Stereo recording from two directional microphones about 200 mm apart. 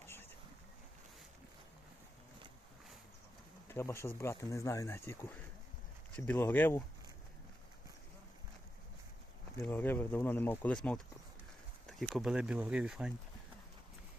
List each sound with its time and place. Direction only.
0.0 s boat: 10° left (ahead or behind)
3.7 s speech: 15° left (ahead or behind)
9.6 s speech: 10° left (ahead or behind)